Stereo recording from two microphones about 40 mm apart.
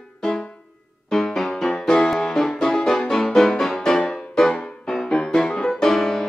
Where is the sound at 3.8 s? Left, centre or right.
Left.